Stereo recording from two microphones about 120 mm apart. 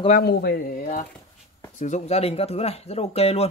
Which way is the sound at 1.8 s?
80° left.